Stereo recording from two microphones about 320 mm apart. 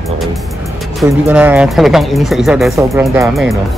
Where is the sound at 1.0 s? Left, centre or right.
Centre.